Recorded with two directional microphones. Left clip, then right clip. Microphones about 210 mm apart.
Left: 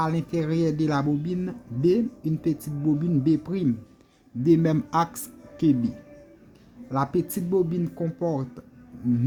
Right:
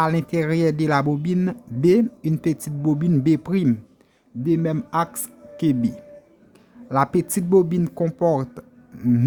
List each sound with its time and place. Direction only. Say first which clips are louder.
0.0 s speech: right 5 dB; 25° right (ahead or behind)
4.4 s speech: left 1 dB; 5° right (ahead or behind)
6.9 s speech: right 6 dB; 25° right (ahead or behind)